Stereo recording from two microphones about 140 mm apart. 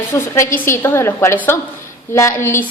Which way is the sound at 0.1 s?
15° left (ahead or behind).